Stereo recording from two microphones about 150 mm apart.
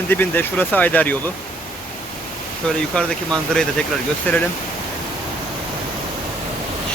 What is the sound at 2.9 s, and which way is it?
Speech, 5° left (ahead or behind).